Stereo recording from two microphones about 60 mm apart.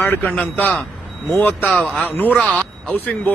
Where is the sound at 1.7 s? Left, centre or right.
Centre.